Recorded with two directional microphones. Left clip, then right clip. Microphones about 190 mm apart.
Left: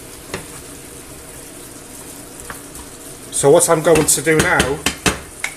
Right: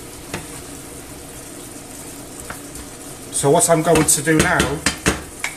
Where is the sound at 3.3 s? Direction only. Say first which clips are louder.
Left 3 dB; 40° left (ahead or behind).